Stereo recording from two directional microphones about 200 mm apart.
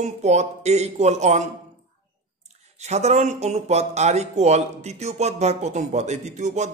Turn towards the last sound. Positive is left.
turn(degrees=-35)  # may be behind; listen again after turning